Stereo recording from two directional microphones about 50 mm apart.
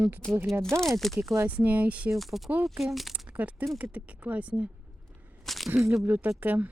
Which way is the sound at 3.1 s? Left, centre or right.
Right.